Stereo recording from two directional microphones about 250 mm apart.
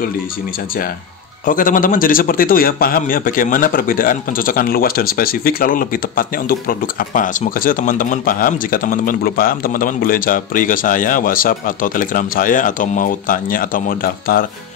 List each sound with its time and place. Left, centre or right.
1.4 s a man's voice: left